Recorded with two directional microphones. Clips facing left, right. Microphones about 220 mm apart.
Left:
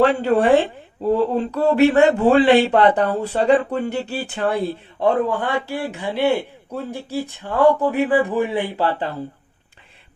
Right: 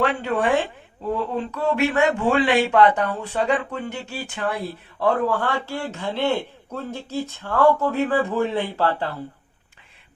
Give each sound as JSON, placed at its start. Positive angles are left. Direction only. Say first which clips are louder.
{"t": 0.0, "sound": "speech", "louder": "left 6 dB", "side_deg": 35}